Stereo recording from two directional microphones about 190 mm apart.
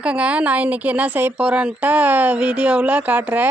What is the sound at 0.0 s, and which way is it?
Speech, 5° right (ahead or behind).